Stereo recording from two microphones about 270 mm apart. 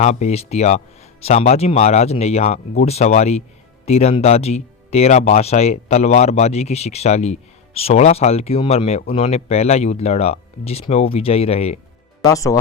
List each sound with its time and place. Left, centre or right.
0.0 s speech: left
12.2 s speech: centre